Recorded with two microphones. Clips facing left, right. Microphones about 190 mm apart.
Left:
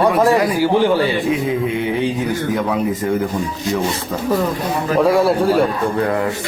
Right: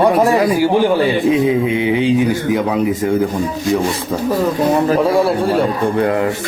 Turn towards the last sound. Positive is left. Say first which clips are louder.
# even
turn(degrees=0)  # may be behind; listen again after turning